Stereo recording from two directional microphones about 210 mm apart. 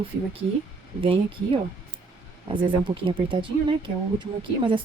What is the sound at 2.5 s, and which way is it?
A woman's voice, 25° right (ahead or behind).